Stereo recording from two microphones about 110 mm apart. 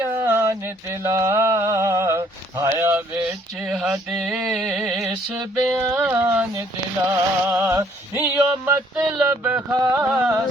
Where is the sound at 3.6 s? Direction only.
5° right (ahead or behind).